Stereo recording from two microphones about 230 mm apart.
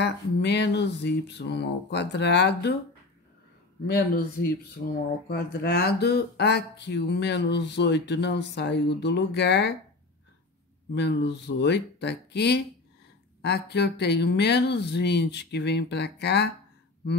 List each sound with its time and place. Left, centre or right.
0.0 s speech: left
3.8 s speech: left
11.0 s speech: left